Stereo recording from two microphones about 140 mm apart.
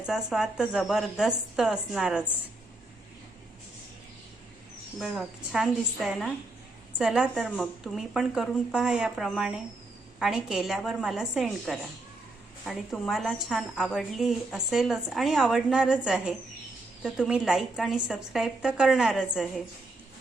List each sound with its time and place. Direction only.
0.0 s a woman's voice: 5° right (ahead or behind)
4.9 s a woman's voice: centre (ahead or behind)